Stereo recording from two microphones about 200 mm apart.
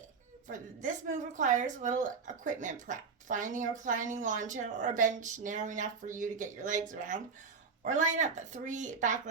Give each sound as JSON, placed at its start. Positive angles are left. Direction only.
{"t": 0.4, "sound": "speech", "side_deg": -40}